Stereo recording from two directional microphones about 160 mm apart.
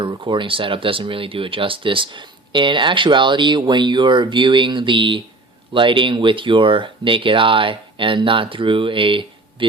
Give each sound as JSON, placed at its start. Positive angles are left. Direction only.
{"t": 0.0, "sound": "speech", "side_deg": -30}